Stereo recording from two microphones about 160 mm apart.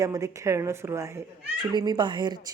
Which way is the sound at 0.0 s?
20° right (ahead or behind).